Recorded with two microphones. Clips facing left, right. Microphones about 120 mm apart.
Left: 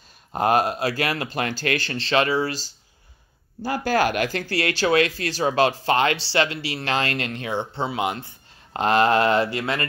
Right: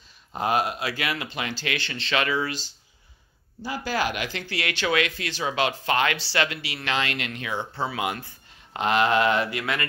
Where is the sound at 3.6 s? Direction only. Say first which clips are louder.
Left 6 dB; 50° left (ahead or behind); by 8.3 s 25° left (ahead or behind).